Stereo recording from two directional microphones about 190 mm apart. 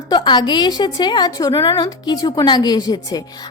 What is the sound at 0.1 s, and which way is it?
A woman's voice, 20° left (ahead or behind).